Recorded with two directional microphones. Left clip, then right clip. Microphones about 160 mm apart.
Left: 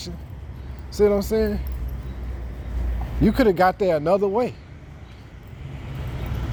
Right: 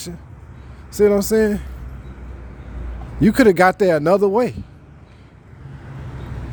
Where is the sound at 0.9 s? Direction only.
55° right (ahead or behind).